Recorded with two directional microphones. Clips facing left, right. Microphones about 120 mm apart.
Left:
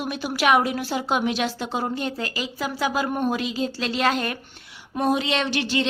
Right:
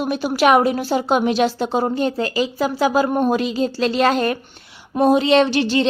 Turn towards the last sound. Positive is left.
turn(degrees=-35)  # may be behind; listen again after turning